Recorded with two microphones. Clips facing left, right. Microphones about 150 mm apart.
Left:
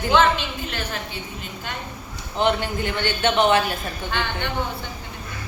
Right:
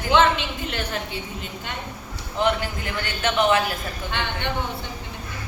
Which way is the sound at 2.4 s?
30° left (ahead or behind).